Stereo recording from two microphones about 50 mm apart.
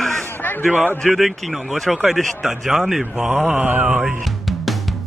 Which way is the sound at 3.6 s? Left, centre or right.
Right.